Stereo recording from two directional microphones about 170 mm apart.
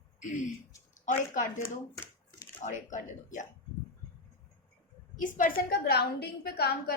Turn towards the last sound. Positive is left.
turn(degrees=70)  # may be behind; listen again after turning